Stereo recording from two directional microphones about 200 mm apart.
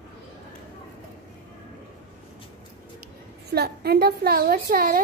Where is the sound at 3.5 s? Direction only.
50° right (ahead or behind).